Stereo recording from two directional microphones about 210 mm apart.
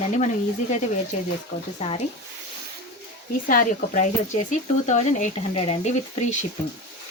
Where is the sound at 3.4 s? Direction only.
40° left (ahead or behind).